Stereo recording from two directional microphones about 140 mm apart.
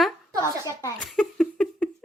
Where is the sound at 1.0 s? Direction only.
5° left (ahead or behind).